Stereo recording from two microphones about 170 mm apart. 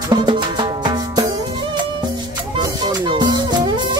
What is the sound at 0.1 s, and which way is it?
Music, 25° right (ahead or behind).